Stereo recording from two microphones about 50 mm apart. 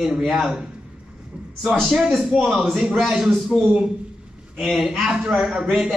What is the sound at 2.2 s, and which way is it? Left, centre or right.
Speech, centre.